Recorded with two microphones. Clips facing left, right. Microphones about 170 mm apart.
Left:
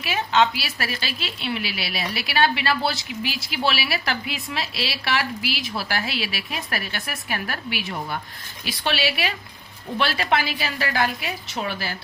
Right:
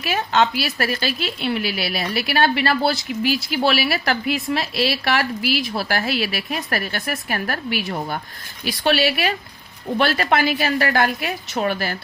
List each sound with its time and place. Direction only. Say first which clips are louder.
0.0 s speech: right 1 dB; 45° right (ahead or behind)